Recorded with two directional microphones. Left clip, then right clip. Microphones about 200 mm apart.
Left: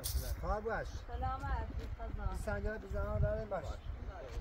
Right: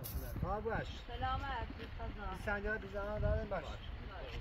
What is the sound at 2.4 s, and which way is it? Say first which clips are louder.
Speech: right 2 dB; 5° left (ahead or behind).